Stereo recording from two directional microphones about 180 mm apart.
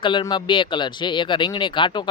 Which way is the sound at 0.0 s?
25° left (ahead or behind).